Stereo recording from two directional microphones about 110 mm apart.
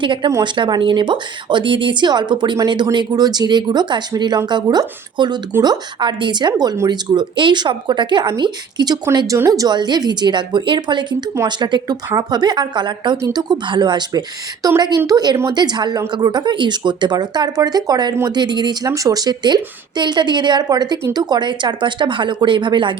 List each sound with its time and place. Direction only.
0.0 s a woman's voice: 50° right (ahead or behind)
18.9 s a woman's voice: 30° right (ahead or behind); by 23.0 s 50° right (ahead or behind)